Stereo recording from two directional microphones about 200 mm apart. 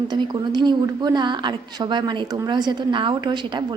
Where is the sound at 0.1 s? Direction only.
20° right (ahead or behind).